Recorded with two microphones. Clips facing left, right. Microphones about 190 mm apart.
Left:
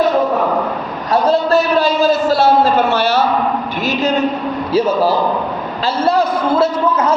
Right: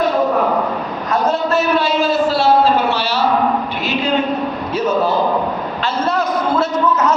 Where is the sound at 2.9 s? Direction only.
50° left (ahead or behind).